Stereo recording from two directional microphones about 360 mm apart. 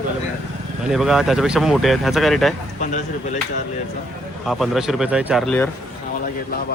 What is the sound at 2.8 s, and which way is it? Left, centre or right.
Speech, centre.